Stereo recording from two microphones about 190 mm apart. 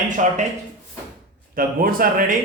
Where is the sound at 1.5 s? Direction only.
50° right (ahead or behind).